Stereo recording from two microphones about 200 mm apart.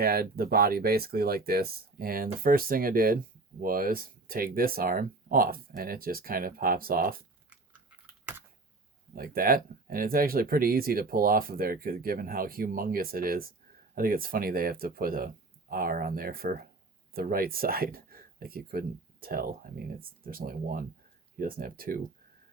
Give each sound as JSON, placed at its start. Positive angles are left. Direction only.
{"t": 0.0, "sound": "speech", "side_deg": -50}
{"t": 7.5, "sound": "a sound", "side_deg": -5}
{"t": 9.1, "sound": "speech", "side_deg": -45}